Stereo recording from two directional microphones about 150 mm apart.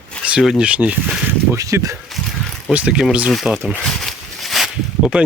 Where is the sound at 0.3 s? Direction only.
5° right (ahead or behind).